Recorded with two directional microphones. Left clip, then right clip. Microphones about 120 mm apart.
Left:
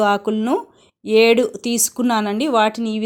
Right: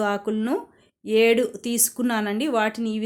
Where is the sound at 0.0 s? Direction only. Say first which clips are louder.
Left 7 dB; 35° left (ahead or behind).